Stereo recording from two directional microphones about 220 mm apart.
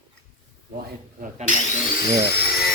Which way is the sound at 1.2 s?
35° right (ahead or behind).